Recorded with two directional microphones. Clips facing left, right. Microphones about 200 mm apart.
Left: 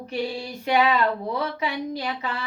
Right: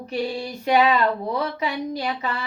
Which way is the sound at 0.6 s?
40° right (ahead or behind).